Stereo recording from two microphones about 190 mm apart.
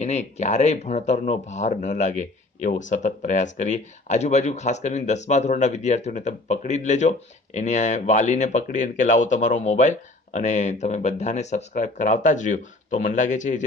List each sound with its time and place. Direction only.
0.0 s speech: 35° left (ahead or behind)